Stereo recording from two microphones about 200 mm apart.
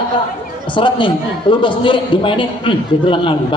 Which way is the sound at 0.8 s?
25° left (ahead or behind).